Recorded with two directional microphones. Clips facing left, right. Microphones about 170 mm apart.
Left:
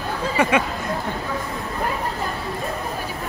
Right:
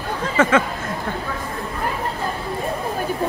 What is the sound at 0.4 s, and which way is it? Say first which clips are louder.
Speech: right 3 dB; 15° left (ahead or behind).